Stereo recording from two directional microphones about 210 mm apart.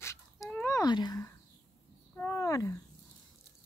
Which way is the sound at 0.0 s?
15° left (ahead or behind).